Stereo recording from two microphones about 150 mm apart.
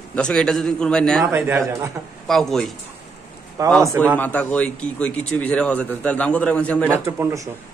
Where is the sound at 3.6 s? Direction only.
25° right (ahead or behind).